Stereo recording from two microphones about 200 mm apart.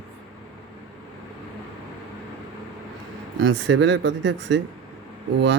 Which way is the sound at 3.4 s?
70° right (ahead or behind).